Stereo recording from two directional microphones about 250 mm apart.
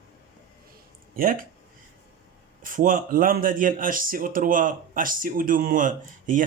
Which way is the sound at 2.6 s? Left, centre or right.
Right.